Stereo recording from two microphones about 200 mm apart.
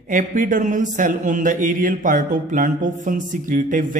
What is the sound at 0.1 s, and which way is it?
Speech, 40° right (ahead or behind).